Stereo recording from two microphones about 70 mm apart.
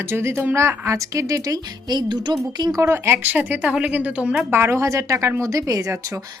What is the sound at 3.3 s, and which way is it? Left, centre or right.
Speech, right.